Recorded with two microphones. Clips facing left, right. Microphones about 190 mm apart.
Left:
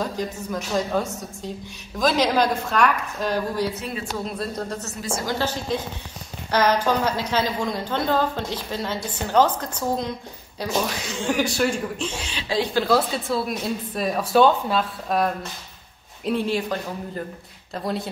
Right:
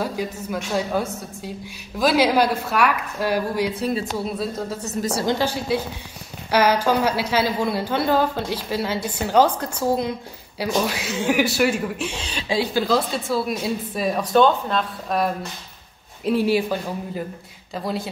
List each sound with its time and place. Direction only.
0.0 s a woman's voice: 10° right (ahead or behind)